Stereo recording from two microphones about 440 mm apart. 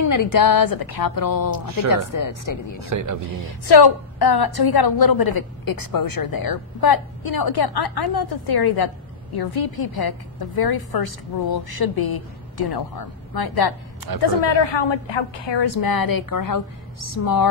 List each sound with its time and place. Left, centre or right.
0.0 s a woman's voice: left
2.8 s a man's voice: right
3.4 s a woman's voice: left
14.1 s a woman's voice: right
14.4 s a woman's voice: left